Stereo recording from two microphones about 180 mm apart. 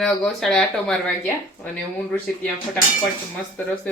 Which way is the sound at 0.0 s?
5° left (ahead or behind).